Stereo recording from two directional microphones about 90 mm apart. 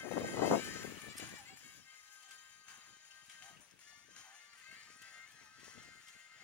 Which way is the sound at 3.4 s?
15° left (ahead or behind).